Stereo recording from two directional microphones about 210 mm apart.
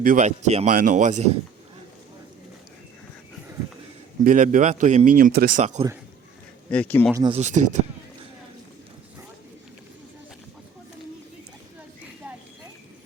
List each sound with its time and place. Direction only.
0.0 s speech: 40° right (ahead or behind)
4.2 s speech: 40° right (ahead or behind)
6.7 s speech: 5° left (ahead or behind)
7.1 s speech: 20° right (ahead or behind)
7.3 s speech: 35° right (ahead or behind)